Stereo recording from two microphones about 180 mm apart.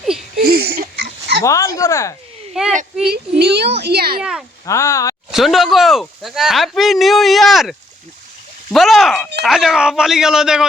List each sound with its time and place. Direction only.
0.4 s a sound: 60° right (ahead or behind)
1.5 s speech: 15° left (ahead or behind)
2.5 s speech: 5° right (ahead or behind)
3.1 s a child's voice: 65° right (ahead or behind)
4.2 s speech: 5° right (ahead or behind)
4.6 s speech: 15° left (ahead or behind)
5.3 s speech: centre (ahead or behind)